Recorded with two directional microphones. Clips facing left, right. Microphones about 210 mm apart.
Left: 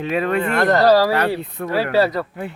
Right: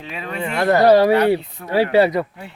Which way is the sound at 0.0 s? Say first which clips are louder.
Left 9 dB; 55° left (ahead or behind).